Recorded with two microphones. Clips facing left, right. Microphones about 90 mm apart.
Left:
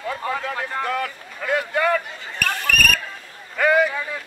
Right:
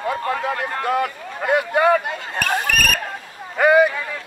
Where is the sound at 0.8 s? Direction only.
20° right (ahead or behind).